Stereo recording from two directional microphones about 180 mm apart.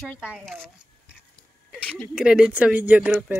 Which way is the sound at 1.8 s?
5° left (ahead or behind).